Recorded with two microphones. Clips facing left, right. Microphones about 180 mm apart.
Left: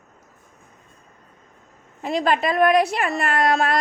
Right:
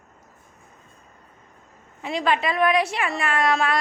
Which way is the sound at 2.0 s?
40° left (ahead or behind).